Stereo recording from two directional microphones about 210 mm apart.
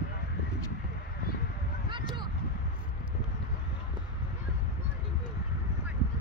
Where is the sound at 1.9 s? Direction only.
20° right (ahead or behind).